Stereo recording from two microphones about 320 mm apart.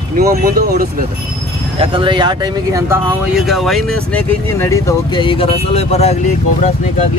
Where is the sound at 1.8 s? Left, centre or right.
Centre.